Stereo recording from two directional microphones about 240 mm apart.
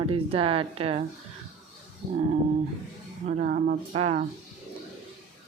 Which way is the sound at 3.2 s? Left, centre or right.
Right.